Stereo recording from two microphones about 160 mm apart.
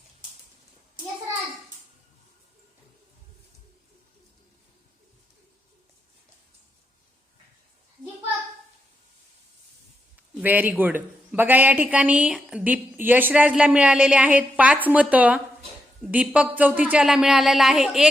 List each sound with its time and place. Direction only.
10.4 s a woman's voice: 10° right (ahead or behind)